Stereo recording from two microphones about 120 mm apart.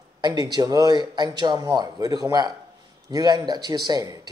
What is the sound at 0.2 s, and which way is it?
Speech, 35° right (ahead or behind).